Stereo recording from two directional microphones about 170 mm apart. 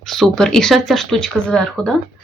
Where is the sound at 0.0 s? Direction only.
Centre (ahead or behind).